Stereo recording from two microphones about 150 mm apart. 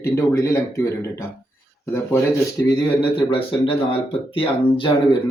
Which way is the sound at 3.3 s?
35° left (ahead or behind).